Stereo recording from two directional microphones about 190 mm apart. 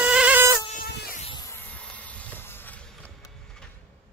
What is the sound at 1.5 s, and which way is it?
Vehicle, 10° left (ahead or behind).